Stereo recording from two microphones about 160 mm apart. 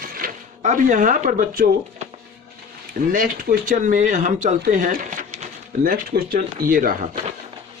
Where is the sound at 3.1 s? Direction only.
60° right (ahead or behind).